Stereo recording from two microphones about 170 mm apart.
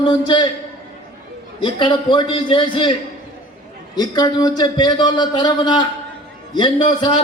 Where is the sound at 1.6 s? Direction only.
30° left (ahead or behind).